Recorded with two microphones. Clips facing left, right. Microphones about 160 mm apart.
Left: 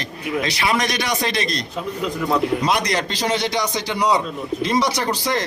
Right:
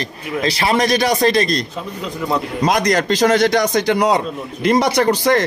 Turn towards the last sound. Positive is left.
turn(degrees=-55)  # may be behind; listen again after turning